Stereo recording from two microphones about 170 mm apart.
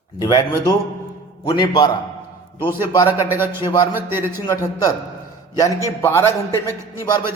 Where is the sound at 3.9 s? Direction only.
15° right (ahead or behind).